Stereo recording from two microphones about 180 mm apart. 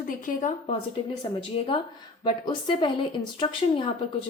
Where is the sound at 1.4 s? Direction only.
30° left (ahead or behind).